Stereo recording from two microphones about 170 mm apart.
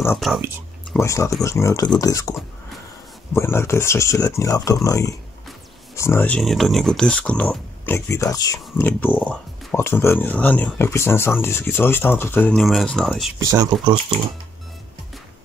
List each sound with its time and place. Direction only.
0.2 s speech: centre (ahead or behind)
0.9 s speech: 15° left (ahead or behind)
3.3 s speech: 15° left (ahead or behind)
13.4 s speech: 20° right (ahead or behind)